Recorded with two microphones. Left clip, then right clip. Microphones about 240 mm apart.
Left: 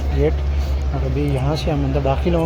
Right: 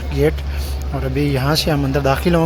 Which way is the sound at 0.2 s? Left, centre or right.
Centre.